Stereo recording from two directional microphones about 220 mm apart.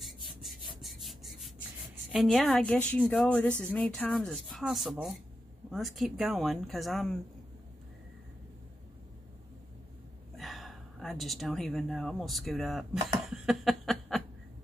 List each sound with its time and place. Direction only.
0.0 s rub: centre (ahead or behind)
2.0 s a woman's voice: centre (ahead or behind)
10.3 s a sound: centre (ahead or behind)